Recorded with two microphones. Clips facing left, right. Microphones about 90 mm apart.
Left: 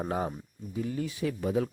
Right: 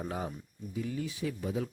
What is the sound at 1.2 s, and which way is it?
Speech, 60° left (ahead or behind).